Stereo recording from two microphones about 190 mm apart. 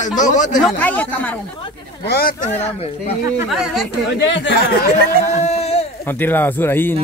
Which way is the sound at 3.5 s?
Centre (ahead or behind).